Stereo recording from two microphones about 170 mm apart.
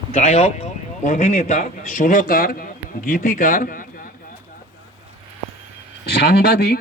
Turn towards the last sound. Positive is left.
turn(degrees=70)  # may be behind; listen again after turning